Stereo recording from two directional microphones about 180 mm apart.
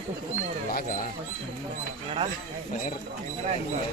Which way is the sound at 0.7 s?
55° left (ahead or behind).